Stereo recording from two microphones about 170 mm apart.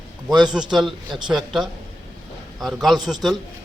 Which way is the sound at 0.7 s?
Centre (ahead or behind).